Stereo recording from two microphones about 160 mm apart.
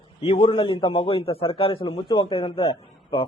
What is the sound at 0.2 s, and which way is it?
A man's voice, 35° left (ahead or behind).